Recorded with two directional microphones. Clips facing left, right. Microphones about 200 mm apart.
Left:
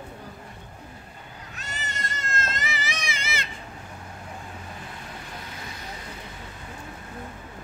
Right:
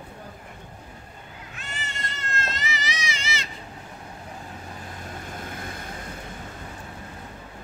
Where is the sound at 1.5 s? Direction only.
40° left (ahead or behind).